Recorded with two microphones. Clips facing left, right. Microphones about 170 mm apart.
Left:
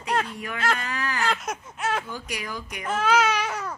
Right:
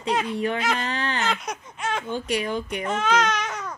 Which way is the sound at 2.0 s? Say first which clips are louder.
Right 8 dB; 25° right (ahead or behind).